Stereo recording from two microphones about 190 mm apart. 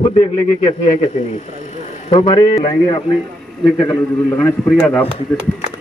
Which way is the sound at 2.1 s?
25° left (ahead or behind).